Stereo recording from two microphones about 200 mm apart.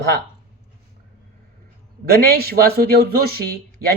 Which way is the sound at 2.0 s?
50° right (ahead or behind).